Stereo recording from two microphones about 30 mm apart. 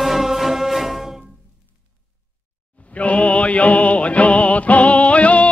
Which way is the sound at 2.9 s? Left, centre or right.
Left.